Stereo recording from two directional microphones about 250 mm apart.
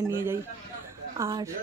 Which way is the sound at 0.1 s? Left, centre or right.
Centre.